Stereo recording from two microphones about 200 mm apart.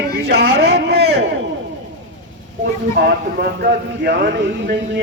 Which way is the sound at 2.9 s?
50° right (ahead or behind).